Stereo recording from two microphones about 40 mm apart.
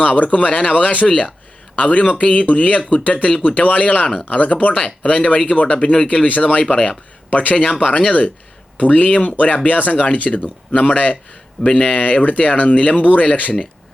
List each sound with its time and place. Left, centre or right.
0.0 s a man's voice: left